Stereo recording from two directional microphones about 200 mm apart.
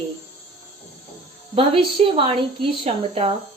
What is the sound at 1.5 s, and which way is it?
A woman's voice, 25° right (ahead or behind).